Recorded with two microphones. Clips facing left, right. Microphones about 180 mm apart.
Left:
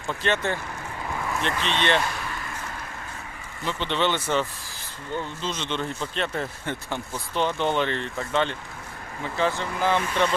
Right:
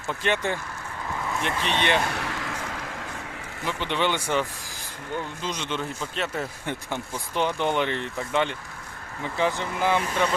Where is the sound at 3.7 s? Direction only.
10° right (ahead or behind).